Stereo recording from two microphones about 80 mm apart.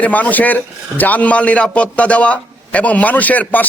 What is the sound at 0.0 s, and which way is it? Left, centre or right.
A man's voice, centre.